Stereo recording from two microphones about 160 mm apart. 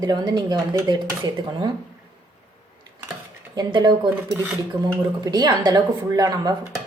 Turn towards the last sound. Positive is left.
turn(degrees=-20)  # may be behind; listen again after turning